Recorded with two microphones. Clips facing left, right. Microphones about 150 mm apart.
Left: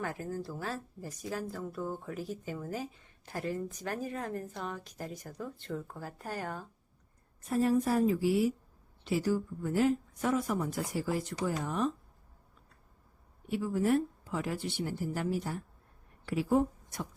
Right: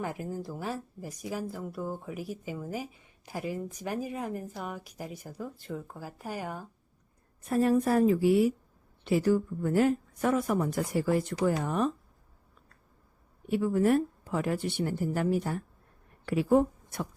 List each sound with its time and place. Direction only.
0.0 s speech: 15° right (ahead or behind)
7.5 s speech: 60° right (ahead or behind)
13.5 s speech: 60° right (ahead or behind)